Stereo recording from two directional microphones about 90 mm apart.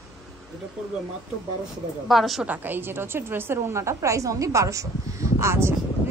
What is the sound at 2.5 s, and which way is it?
A woman's voice, 20° right (ahead or behind).